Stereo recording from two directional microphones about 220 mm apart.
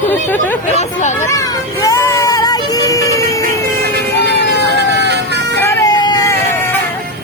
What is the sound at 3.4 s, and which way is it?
Music, 45° right (ahead or behind).